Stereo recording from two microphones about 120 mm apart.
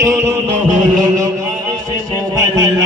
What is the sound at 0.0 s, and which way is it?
Music, 25° right (ahead or behind).